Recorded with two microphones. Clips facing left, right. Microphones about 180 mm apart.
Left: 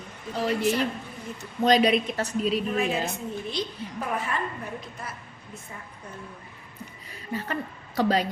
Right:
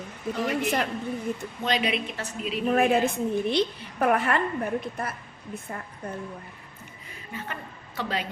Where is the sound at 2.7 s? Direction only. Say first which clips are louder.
Right 5 dB; 55° right (ahead or behind).